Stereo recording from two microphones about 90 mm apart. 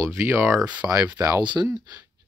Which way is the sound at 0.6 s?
15° right (ahead or behind).